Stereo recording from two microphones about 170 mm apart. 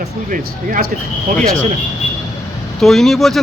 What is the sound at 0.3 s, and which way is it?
Speech, 55° right (ahead or behind).